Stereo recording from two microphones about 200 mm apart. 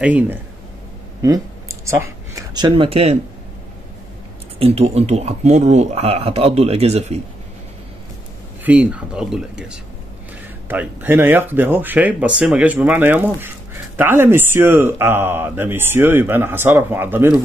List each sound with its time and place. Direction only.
0.0 s speech: 5° right (ahead or behind); by 3.2 s 30° right (ahead or behind)
4.6 s speech: 30° right (ahead or behind)
8.6 s speech: 5° right (ahead or behind)